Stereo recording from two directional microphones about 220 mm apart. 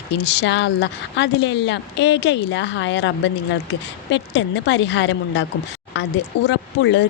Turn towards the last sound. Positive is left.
turn(degrees=55)  # may be behind; listen again after turning